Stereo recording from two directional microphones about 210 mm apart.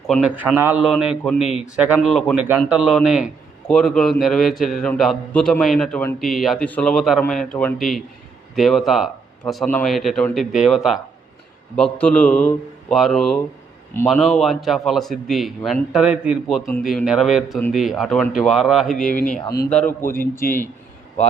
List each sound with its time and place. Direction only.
0.1 s a man's voice: 5° right (ahead or behind)
19.8 s a man's voice: 10° left (ahead or behind)
20.4 s speech: 40° left (ahead or behind)